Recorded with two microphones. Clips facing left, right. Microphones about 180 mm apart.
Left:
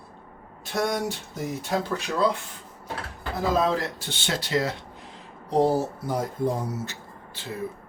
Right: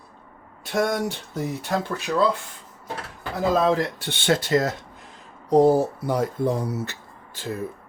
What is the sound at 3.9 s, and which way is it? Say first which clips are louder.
Speech: right 8 dB; 60° right (ahead or behind).